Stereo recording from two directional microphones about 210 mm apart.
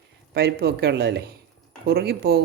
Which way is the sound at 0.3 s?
50° right (ahead or behind).